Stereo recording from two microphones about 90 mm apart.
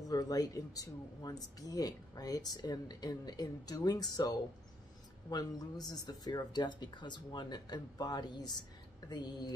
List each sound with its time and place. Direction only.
0.1 s speech: 45° left (ahead or behind)